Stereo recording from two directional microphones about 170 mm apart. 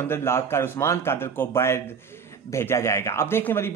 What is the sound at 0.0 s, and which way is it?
Speech, 15° left (ahead or behind).